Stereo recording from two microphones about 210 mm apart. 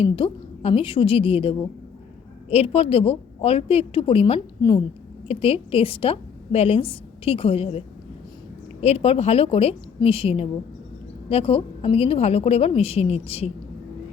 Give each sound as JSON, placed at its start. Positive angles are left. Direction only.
{"t": 0.0, "sound": "a woman's voice", "side_deg": 25}